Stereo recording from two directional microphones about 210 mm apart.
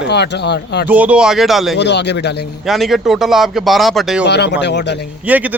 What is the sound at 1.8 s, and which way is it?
Speech, 55° left (ahead or behind).